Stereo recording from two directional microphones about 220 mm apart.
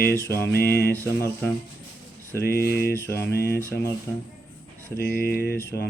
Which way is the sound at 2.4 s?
45° left (ahead or behind).